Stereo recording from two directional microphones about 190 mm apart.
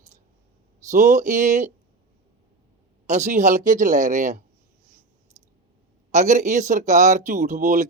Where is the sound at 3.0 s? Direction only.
40° right (ahead or behind).